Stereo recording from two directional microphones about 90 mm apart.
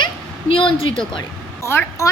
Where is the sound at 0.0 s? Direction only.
75° left (ahead or behind).